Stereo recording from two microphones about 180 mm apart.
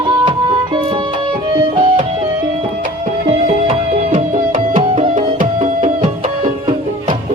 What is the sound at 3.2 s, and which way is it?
Music, 35° right (ahead or behind).